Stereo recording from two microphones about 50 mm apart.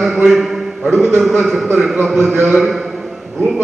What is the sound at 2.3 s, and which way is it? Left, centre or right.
Speech, right.